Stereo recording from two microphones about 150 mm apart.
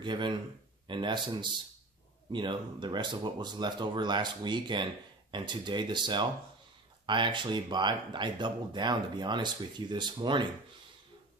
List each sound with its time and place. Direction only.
0.0 s speech: 30° right (ahead or behind)